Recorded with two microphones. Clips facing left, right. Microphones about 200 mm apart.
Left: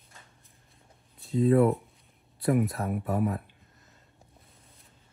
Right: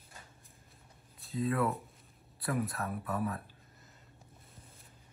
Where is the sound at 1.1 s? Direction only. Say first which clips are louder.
Left 9 dB; centre (ahead or behind).